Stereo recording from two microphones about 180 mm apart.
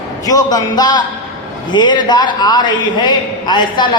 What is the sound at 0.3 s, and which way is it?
A man's voice, 20° left (ahead or behind).